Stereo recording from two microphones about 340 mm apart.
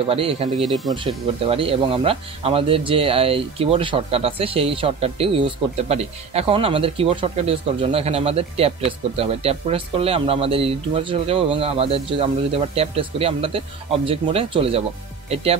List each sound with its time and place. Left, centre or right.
0.1 s speech: centre